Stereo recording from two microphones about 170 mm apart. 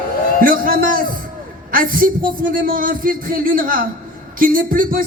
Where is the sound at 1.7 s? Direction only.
55° right (ahead or behind).